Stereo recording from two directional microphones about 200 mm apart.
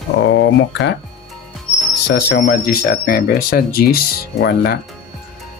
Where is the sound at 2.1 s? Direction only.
50° left (ahead or behind).